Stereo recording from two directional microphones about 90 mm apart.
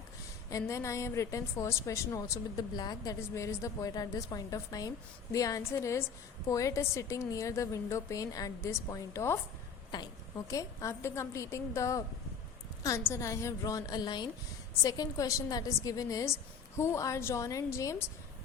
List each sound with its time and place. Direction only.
0.5 s a woman's voice: 35° left (ahead or behind)
3.2 s a woman's voice: 35° left (ahead or behind)
13.1 s a woman's voice: 35° left (ahead or behind)